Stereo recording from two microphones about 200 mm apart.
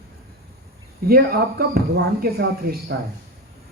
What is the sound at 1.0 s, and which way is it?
Speech, 50° right (ahead or behind).